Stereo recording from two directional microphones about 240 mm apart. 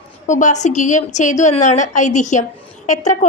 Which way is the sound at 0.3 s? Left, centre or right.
Left.